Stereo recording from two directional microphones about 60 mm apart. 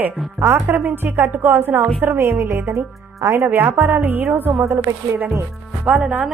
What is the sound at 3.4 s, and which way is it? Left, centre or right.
Speech, right.